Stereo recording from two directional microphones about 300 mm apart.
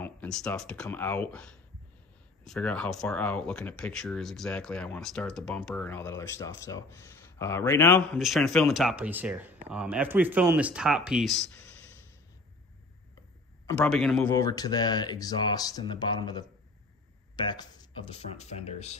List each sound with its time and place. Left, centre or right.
0.0 s a man's voice: centre
13.7 s a man's voice: centre
14.2 s speech: centre